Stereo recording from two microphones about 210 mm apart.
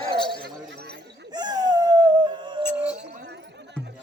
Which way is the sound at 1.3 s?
20° right (ahead or behind).